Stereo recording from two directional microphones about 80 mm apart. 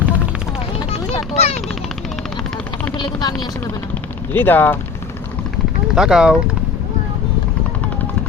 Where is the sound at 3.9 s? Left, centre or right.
Left.